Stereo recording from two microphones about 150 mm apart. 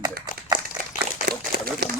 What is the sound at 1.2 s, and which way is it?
Speech, 90° right.